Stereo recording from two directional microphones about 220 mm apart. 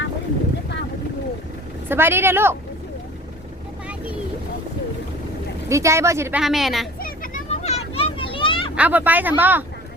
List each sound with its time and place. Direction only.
1.9 s speech: 10° right (ahead or behind)
5.6 s speech: 15° right (ahead or behind)
6.4 s speech: centre (ahead or behind)
7.0 s children playing: 40° left (ahead or behind); by 8.7 s 20° left (ahead or behind)
8.7 s speech: 5° right (ahead or behind)